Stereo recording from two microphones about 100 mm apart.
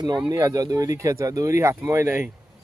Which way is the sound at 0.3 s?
35° right (ahead or behind).